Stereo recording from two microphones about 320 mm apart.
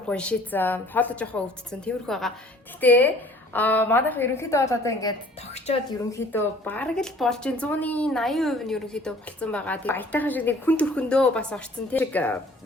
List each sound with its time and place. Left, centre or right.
0.1 s a woman's voice: centre
6.3 s speech: centre